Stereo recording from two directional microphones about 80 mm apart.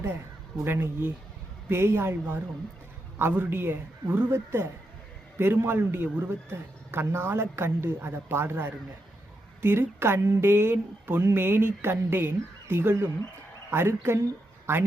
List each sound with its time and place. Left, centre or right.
0.6 s a woman's voice: right